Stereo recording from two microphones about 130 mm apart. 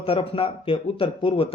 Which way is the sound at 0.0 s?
45° left (ahead or behind).